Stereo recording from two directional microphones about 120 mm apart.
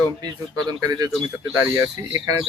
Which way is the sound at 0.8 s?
30° right (ahead or behind).